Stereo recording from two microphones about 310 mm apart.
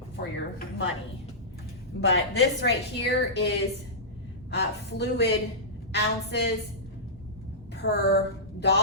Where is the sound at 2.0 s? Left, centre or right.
Left.